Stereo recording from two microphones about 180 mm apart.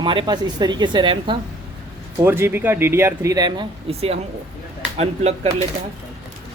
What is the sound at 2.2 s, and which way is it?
Speech, 15° right (ahead or behind).